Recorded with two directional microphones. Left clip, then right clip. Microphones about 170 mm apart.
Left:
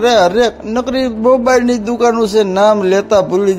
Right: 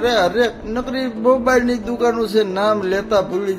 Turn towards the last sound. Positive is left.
turn(degrees=45)  # may be behind; listen again after turning